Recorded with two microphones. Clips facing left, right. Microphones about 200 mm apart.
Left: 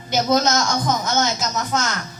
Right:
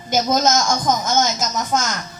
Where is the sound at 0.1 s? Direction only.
45° right (ahead or behind).